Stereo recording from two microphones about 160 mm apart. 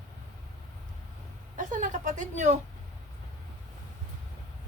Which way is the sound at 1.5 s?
55° right (ahead or behind).